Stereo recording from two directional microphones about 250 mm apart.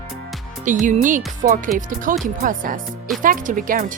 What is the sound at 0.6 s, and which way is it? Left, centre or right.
Speech, right.